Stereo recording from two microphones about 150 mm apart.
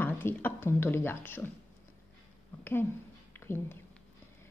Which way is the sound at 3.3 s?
15° left (ahead or behind).